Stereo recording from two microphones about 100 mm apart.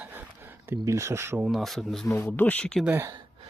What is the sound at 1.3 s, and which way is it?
Speech, 5° right (ahead or behind).